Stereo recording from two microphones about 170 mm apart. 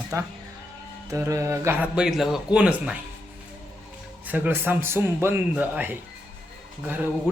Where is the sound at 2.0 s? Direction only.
Centre (ahead or behind).